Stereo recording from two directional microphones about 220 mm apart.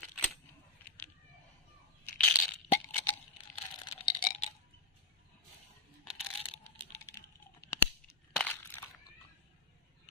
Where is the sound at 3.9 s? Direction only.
20° left (ahead or behind).